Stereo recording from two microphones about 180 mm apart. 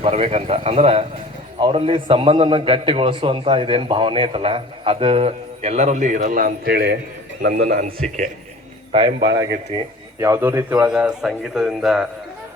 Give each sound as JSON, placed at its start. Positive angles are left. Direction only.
{"t": 0.0, "sound": "a man's voice", "side_deg": -35}
{"t": 7.5, "sound": "a man's voice", "side_deg": -45}
{"t": 7.9, "sound": "a man's voice", "side_deg": 5}
{"t": 8.9, "sound": "a man's voice", "side_deg": -30}